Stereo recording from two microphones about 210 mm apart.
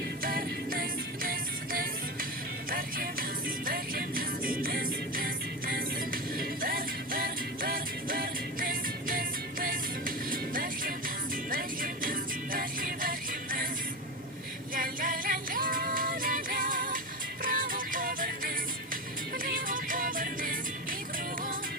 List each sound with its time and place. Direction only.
0.2 s music: 45° right (ahead or behind)
14.8 s music: 40° right (ahead or behind)